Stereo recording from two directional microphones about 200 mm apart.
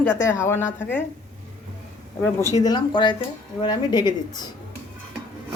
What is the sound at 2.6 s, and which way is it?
Speech, 20° left (ahead or behind).